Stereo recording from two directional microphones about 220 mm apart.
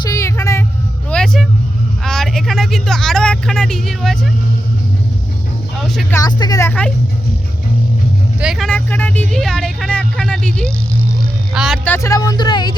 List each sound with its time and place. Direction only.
0.1 s a sound: 15° left (ahead or behind)
1.1 s vehicle: centre (ahead or behind)
2.0 s speech: centre (ahead or behind)
5.8 s speech: centre (ahead or behind)
6.1 s speech: 15° left (ahead or behind)
8.4 s speech: centre (ahead or behind)
11.9 s speech: 15° left (ahead or behind)